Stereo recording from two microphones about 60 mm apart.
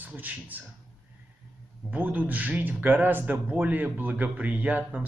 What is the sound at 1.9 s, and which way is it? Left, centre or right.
A man's voice, right.